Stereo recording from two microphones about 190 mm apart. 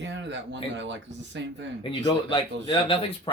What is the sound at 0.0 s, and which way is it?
Speech, 70° right (ahead or behind).